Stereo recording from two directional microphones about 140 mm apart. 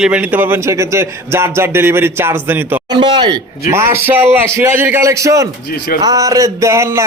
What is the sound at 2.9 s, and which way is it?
Speech, 35° right (ahead or behind).